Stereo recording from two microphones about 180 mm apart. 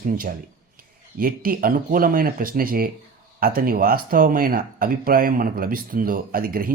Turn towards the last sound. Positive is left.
turn(degrees=-55)  # may be behind; listen again after turning